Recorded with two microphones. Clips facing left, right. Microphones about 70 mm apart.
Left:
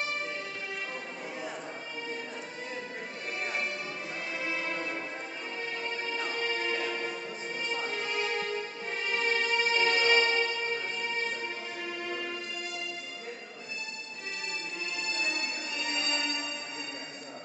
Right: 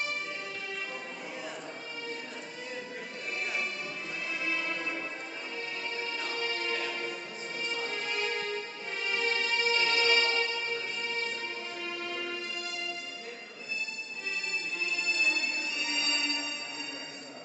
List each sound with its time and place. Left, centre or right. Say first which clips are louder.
4.4 s music: even; left
5.9 s music: left 1 dB; left
15.8 s music: left 3 dB; left